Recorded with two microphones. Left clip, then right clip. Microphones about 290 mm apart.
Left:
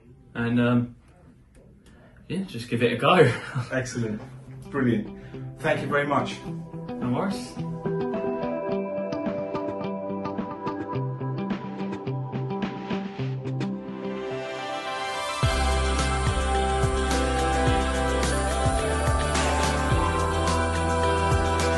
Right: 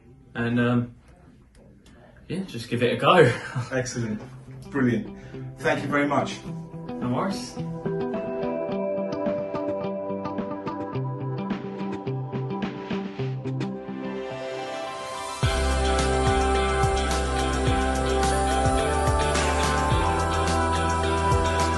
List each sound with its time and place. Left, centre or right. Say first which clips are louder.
0.4 s a man's voice: even; centre
2.2 s a man's voice: even; centre
5.6 s speech: right 1 dB; left
6.4 s music: left 1 dB; centre